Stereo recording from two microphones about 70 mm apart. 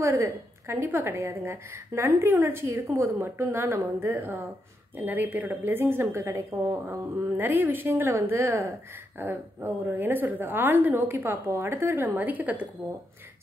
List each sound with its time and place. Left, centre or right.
0.0 s a woman's voice: right
3.1 s a woman's voice: right
6.7 s a woman's voice: right